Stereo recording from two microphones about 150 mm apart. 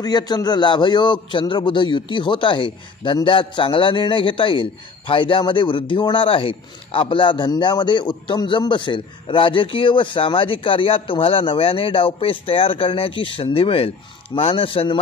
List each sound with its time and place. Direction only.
0.0 s a man's voice: 25° left (ahead or behind)